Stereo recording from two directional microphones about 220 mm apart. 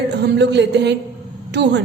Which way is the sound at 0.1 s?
50° right (ahead or behind).